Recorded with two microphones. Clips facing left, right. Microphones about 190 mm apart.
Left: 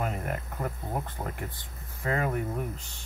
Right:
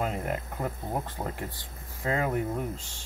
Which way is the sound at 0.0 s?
20° right (ahead or behind).